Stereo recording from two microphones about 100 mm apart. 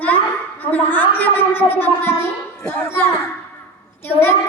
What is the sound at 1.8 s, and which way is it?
Child singing, 20° left (ahead or behind).